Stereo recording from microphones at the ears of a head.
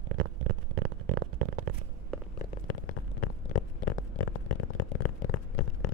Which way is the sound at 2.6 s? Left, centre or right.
Left.